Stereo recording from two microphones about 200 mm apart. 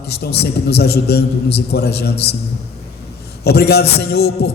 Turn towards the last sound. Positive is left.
turn(degrees=55)  # may be behind; listen again after turning